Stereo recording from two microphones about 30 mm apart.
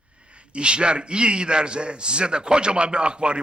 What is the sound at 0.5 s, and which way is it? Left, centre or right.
A man's voice, right.